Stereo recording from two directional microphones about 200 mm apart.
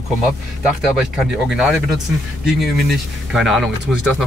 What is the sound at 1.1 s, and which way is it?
Speech, 5° right (ahead or behind).